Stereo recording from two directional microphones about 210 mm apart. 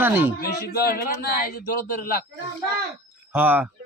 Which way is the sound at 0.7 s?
50° left (ahead or behind).